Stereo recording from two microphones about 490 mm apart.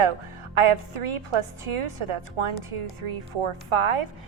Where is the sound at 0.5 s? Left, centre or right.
Right.